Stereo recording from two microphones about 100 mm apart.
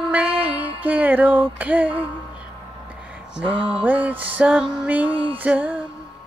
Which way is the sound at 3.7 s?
15° right (ahead or behind).